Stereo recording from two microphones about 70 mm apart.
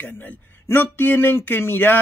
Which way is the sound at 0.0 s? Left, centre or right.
Left.